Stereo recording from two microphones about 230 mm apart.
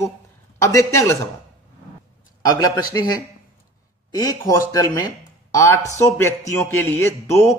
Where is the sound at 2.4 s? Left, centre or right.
Centre.